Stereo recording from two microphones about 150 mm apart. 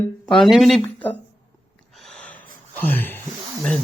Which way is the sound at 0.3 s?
Centre (ahead or behind).